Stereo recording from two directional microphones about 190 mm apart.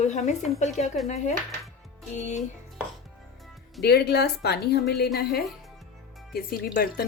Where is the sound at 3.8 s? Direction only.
60° left (ahead or behind).